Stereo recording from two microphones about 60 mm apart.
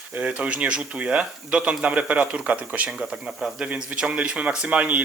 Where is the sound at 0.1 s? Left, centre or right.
Right.